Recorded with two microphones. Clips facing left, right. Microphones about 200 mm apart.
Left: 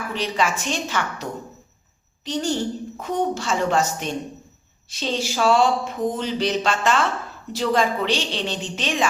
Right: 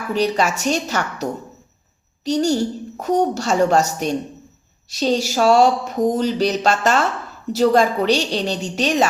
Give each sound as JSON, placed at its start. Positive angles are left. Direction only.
{"t": 0.1, "sound": "speech", "side_deg": -40}